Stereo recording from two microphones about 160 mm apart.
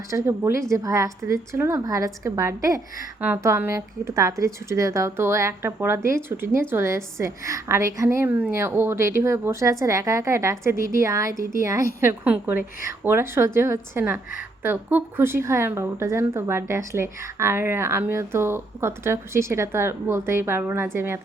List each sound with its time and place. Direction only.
0.1 s a woman's voice: 15° right (ahead or behind)